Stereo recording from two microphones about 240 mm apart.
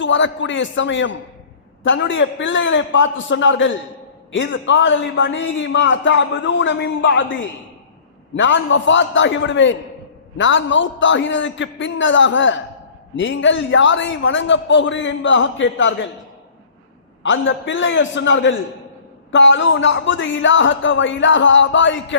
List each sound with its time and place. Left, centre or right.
0.0 s a man's voice: left
8.4 s a man's voice: left
17.2 s a man's voice: left